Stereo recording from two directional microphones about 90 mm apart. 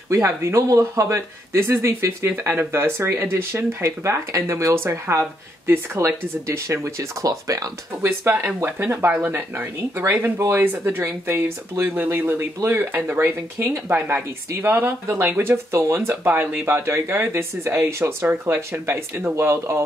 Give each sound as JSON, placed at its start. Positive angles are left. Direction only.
{"t": 0.1, "sound": "speech", "side_deg": -35}
{"t": 8.0, "sound": "speech", "side_deg": -25}